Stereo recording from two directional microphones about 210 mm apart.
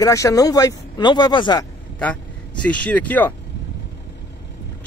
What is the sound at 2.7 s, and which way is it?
Speech, 5° left (ahead or behind).